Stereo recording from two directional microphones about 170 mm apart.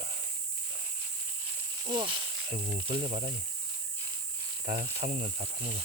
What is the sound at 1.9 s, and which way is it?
Speech, 30° right (ahead or behind).